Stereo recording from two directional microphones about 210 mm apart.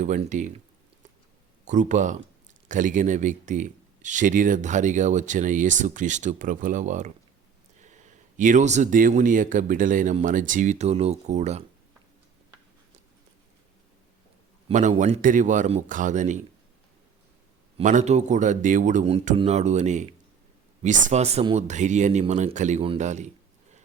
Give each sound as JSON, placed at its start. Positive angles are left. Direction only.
{"t": 0.0, "sound": "speech", "side_deg": -35}
{"t": 1.6, "sound": "speech", "side_deg": -35}
{"t": 14.7, "sound": "speech", "side_deg": -35}
{"t": 17.7, "sound": "speech", "side_deg": -35}